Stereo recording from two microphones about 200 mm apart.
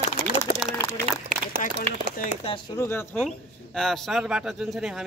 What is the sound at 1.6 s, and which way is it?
Speech, 40° left (ahead or behind).